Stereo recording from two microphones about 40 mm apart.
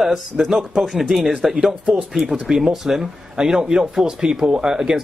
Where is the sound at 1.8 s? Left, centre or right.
Right.